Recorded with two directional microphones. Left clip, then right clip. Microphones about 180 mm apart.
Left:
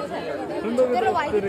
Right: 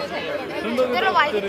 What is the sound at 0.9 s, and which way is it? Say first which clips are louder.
Speech: right 3 dB; 55° left (ahead or behind).